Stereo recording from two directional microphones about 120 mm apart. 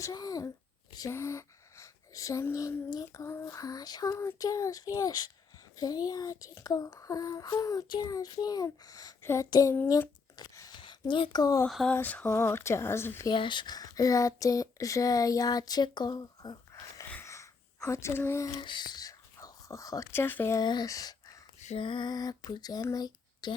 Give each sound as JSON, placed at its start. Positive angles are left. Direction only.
{"t": 0.0, "sound": "speech", "side_deg": 30}
{"t": 9.8, "sound": "a sound", "side_deg": 30}
{"t": 10.8, "sound": "speech", "side_deg": 45}
{"t": 11.7, "sound": "a sound", "side_deg": 5}
{"t": 11.9, "sound": "speech", "side_deg": 15}
{"t": 13.3, "sound": "speech", "side_deg": 40}
{"t": 17.2, "sound": "a sound", "side_deg": 25}
{"t": 18.6, "sound": "speech", "side_deg": 40}
{"t": 20.6, "sound": "speech", "side_deg": 35}
{"t": 21.8, "sound": "speech", "side_deg": 45}